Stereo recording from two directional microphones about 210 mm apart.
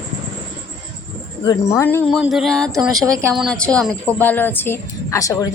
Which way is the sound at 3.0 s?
15° right (ahead or behind).